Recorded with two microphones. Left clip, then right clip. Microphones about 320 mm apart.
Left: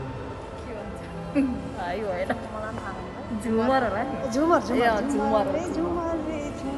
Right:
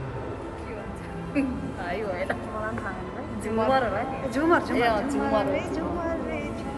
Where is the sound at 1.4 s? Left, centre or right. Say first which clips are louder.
Left 2 dB; left.